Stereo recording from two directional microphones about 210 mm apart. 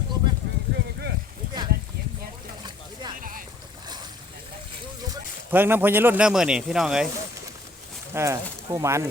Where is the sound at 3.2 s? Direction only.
40° right (ahead or behind).